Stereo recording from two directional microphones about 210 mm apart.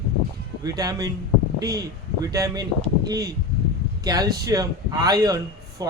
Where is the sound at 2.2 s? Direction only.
15° right (ahead or behind).